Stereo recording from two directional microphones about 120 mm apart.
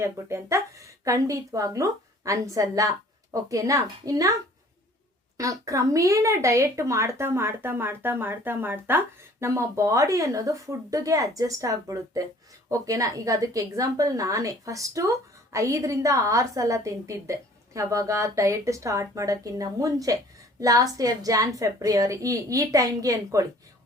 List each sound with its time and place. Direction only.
0.0 s speech: 25° right (ahead or behind)
5.4 s speech: 25° right (ahead or behind)